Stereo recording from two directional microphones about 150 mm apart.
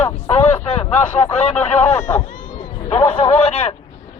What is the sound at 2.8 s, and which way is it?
Speech, 40° left (ahead or behind).